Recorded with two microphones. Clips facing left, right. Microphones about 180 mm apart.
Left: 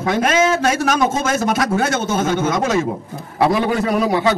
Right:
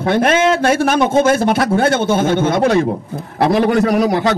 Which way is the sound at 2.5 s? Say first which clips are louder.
Right 5 dB; 60° right (ahead or behind).